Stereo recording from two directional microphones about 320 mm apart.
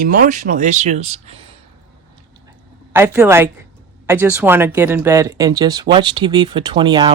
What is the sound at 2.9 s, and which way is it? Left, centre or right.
Speech, centre.